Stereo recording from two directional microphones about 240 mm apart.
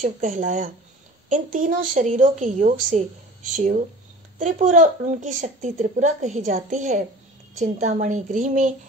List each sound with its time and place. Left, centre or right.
0.0 s a woman's voice: right